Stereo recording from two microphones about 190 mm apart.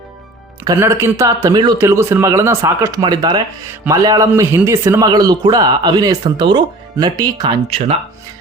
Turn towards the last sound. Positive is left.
turn(degrees=-30)  # may be behind; listen again after turning